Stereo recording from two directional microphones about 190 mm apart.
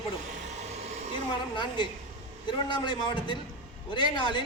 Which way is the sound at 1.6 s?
25° left (ahead or behind).